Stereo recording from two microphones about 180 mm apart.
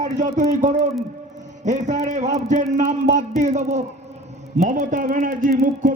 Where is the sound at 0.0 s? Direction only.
45° right (ahead or behind).